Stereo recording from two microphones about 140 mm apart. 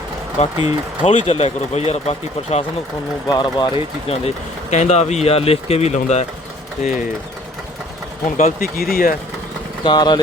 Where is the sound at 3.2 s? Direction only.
30° left (ahead or behind).